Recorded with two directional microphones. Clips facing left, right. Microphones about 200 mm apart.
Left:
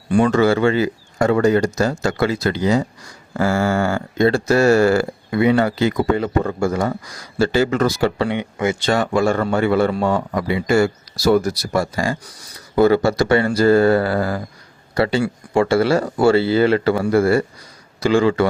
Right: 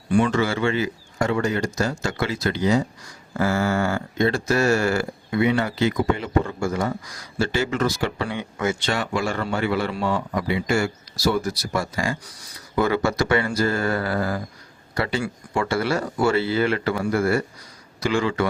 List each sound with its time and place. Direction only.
0.1 s speech: 40° left (ahead or behind)
8.4 s speech: 20° left (ahead or behind)
8.9 s a man's voice: 45° left (ahead or behind)